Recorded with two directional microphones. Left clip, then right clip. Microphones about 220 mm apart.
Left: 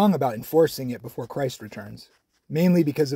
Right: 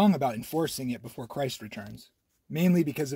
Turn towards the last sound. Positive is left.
turn(degrees=20)  # may be behind; listen again after turning